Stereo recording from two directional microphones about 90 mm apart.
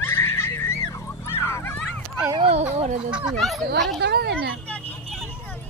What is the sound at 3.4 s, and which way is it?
Speech, centre (ahead or behind).